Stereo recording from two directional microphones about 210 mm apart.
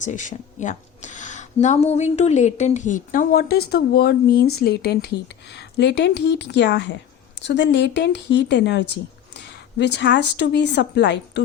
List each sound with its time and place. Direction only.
0.0 s a woman's voice: 35° left (ahead or behind); by 11.4 s 55° left (ahead or behind)